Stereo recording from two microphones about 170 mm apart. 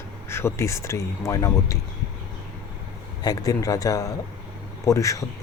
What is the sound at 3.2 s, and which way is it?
Speech, 20° left (ahead or behind).